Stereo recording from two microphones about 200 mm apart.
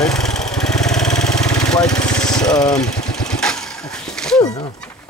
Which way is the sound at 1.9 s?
20° left (ahead or behind).